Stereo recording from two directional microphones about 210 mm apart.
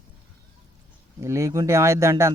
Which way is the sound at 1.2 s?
15° right (ahead or behind).